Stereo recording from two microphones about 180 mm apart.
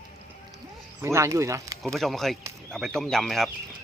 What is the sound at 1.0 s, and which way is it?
Speech, 15° right (ahead or behind).